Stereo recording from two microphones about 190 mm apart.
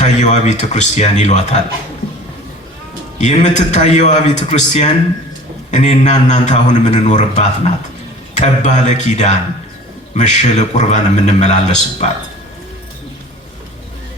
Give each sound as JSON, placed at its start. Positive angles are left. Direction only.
{"t": 0.0, "sound": "a man's voice", "side_deg": 35}
{"t": 3.2, "sound": "a man's voice", "side_deg": 40}